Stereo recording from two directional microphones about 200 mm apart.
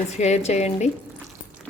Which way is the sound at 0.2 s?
35° left (ahead or behind).